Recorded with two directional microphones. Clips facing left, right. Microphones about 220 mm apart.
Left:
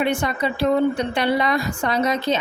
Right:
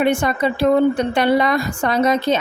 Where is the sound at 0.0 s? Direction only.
50° right (ahead or behind).